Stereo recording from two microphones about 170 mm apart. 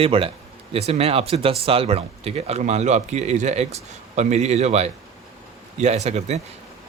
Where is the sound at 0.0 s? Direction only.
35° right (ahead or behind).